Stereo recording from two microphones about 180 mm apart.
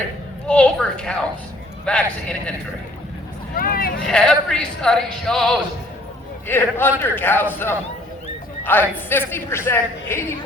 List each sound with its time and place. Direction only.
0.4 s speech: 5° left (ahead or behind)
3.5 s speech: 55° left (ahead or behind)
4.0 s a man's voice: 5° left (ahead or behind)